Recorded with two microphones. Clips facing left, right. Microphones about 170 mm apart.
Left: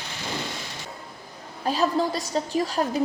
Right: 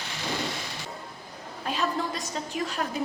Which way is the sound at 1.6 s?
35° left (ahead or behind).